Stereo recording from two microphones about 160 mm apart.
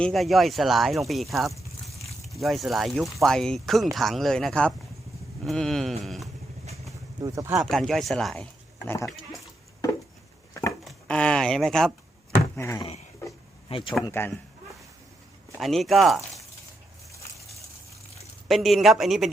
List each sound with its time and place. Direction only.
0.0 s speech: centre (ahead or behind)
7.2 s speech: 20° right (ahead or behind)
7.6 s speech: centre (ahead or behind)
10.5 s wood: 20° left (ahead or behind)
10.8 s a sound: 5° left (ahead or behind)
12.5 s a sound: 15° left (ahead or behind)
13.7 s speech: 35° left (ahead or behind)
15.5 s speech: centre (ahead or behind)
18.4 s speech: centre (ahead or behind)